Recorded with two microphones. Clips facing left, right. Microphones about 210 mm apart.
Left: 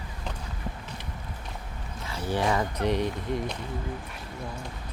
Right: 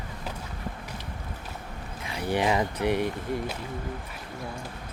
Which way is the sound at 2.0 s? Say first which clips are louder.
Right 1 dB; 15° right (ahead or behind).